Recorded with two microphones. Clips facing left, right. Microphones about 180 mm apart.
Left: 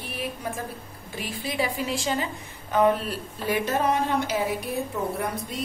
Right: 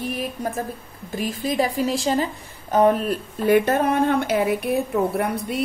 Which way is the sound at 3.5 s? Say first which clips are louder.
Right 7 dB; 55° right (ahead or behind).